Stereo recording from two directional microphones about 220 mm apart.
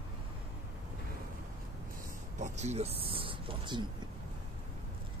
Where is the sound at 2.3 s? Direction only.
30° right (ahead or behind).